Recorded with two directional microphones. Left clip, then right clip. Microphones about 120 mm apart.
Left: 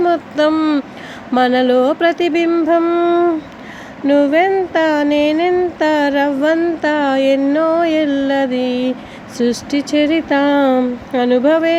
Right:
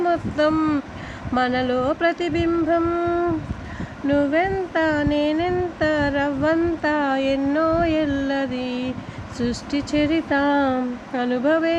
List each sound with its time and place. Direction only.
0.0 s speech: 40° left (ahead or behind)
1.3 s music: 45° left (ahead or behind)
4.0 s speech: 40° left (ahead or behind)